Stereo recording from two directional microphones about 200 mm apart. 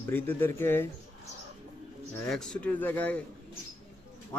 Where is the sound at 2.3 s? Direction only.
5° left (ahead or behind).